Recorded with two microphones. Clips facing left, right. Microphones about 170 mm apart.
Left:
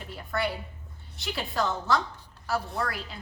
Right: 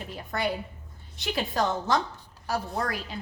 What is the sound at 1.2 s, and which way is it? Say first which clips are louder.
A woman's voice: right 2 dB; 20° right (ahead or behind).